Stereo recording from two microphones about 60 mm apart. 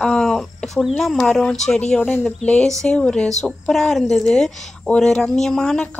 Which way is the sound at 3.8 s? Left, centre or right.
Centre.